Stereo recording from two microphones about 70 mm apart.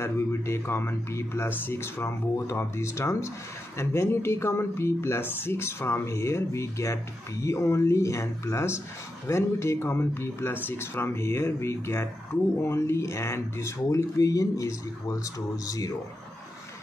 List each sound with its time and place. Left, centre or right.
0.0 s speech: left